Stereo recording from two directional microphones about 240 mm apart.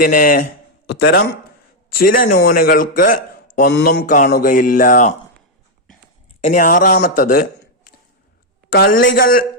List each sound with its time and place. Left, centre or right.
0.0 s speech: left
6.4 s speech: left
8.7 s speech: left